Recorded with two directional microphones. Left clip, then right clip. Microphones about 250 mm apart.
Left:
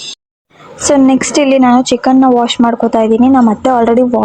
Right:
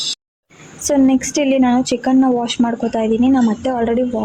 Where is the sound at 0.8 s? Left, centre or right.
Centre.